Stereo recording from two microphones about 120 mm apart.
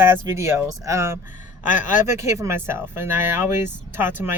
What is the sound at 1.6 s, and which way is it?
Speech, 90° left.